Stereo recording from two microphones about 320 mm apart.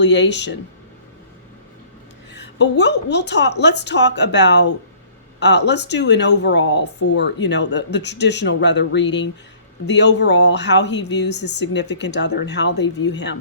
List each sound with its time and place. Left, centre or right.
0.0 s speech: left
2.3 s speech: left